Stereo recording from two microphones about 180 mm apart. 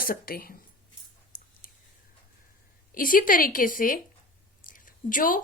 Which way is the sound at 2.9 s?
50° left (ahead or behind).